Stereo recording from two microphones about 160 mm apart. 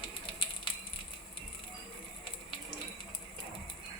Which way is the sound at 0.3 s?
30° left (ahead or behind).